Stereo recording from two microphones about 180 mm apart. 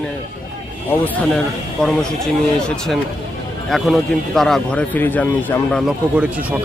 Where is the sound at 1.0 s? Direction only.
10° left (ahead or behind).